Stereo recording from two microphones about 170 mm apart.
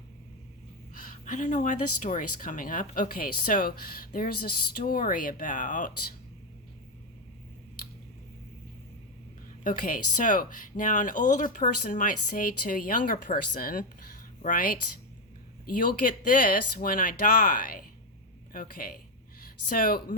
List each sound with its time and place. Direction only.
1.2 s speech: 50° left (ahead or behind)
9.6 s speech: 55° left (ahead or behind)